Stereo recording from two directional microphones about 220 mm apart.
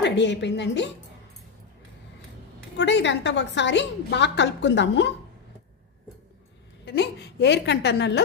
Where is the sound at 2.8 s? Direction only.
55° left (ahead or behind).